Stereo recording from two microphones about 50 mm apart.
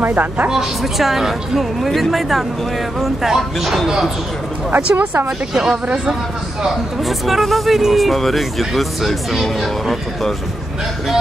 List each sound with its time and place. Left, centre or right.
0.0 s speech: right
0.5 s speech: centre
4.7 s speech: right
5.5 s speech: centre
7.1 s speech: centre